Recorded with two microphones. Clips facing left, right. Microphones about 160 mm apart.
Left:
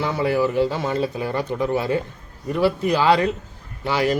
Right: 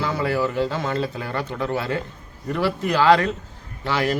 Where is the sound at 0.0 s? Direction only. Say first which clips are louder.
Left 2 dB; 15° left (ahead or behind).